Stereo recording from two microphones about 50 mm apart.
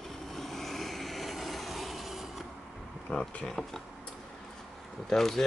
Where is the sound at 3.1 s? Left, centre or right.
Left.